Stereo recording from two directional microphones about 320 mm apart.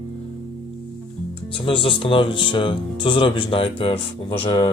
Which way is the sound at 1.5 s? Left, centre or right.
Centre.